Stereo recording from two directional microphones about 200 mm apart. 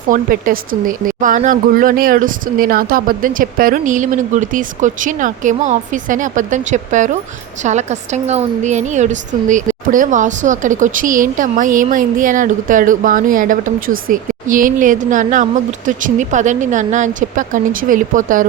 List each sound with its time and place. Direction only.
0.1 s a woman's voice: 45° right (ahead or behind)